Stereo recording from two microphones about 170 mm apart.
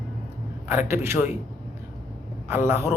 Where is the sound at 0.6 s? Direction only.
15° right (ahead or behind).